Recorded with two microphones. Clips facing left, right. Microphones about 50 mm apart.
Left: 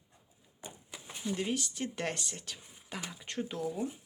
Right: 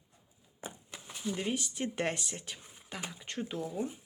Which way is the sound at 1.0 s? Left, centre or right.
Centre.